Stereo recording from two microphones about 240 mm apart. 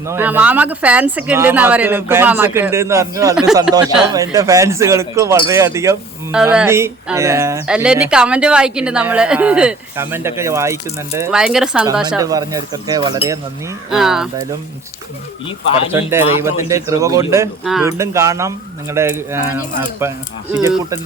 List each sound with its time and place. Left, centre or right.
0.0 s speech: centre
12.0 s speech: centre
13.9 s speech: centre
15.9 s speech: centre
17.6 s speech: centre
17.8 s speech: centre